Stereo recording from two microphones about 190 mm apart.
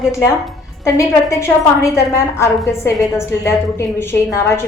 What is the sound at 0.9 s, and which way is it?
Speech, 15° left (ahead or behind).